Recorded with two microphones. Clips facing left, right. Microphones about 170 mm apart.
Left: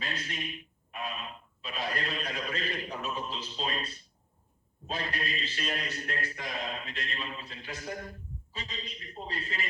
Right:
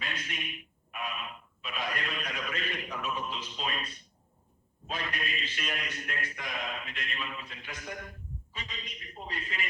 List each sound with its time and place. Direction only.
0.0 s a man's voice: 35° left (ahead or behind)